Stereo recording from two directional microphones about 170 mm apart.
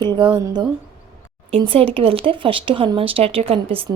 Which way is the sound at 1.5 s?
35° right (ahead or behind).